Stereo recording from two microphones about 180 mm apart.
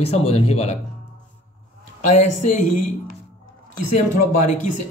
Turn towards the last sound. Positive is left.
turn(degrees=40)  # may be behind; listen again after turning